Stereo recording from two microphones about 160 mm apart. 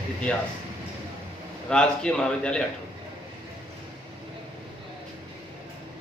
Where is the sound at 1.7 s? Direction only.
5° left (ahead or behind).